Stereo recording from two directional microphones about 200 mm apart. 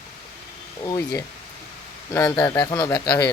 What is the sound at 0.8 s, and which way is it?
Speech, 15° left (ahead or behind).